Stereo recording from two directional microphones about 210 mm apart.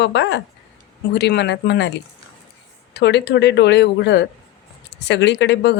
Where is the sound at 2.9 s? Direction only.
55° left (ahead or behind).